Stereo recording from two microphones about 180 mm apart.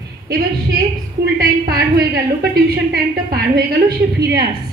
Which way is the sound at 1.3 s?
60° right (ahead or behind).